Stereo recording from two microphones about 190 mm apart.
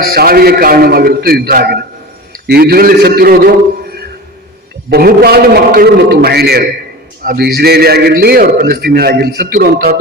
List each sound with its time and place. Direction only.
0.0 s a man's voice: 50° right (ahead or behind)
4.9 s a man's voice: 55° right (ahead or behind)